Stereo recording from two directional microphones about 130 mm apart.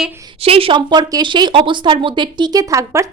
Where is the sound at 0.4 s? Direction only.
45° right (ahead or behind).